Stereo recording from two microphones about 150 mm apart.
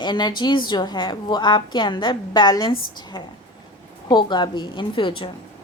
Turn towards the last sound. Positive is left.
turn(degrees=35)  # may be behind; listen again after turning